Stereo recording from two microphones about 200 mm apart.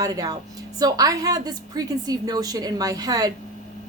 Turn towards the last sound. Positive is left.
turn(degrees=-20)  # may be behind; listen again after turning